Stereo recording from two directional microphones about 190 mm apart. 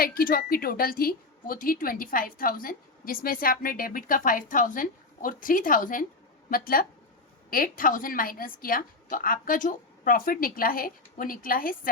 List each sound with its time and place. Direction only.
0.0 s a woman's voice: 50° left (ahead or behind)